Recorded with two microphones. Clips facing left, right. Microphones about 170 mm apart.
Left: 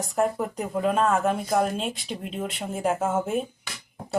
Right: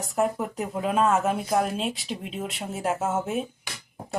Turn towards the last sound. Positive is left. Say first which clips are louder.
# left 2 dB
turn(degrees=0)  # may be behind; listen again after turning